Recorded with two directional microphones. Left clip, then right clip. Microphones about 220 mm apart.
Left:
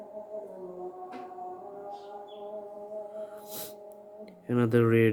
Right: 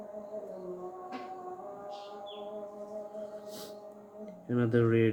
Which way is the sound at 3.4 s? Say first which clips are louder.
Left 2 dB; 40° left (ahead or behind).